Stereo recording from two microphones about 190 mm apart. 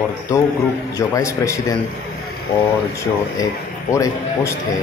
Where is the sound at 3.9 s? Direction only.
15° left (ahead or behind).